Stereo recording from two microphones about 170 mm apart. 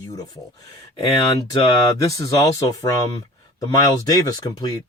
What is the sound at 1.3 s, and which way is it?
Speech, 20° left (ahead or behind).